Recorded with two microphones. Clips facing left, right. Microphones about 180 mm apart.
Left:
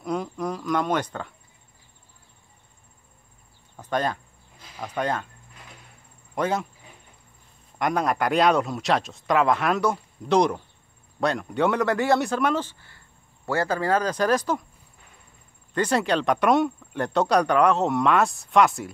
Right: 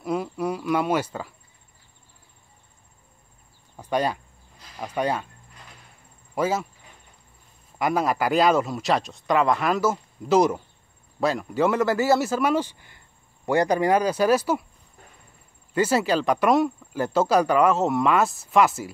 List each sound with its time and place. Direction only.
0.0 s insect: 5° right (ahead or behind)
3.7 s cricket: 10° right (ahead or behind)
4.7 s speech: 10° right (ahead or behind)
6.3 s speech: 5° right (ahead or behind)
7.8 s speech: 5° right (ahead or behind)
15.7 s speech: 5° right (ahead or behind)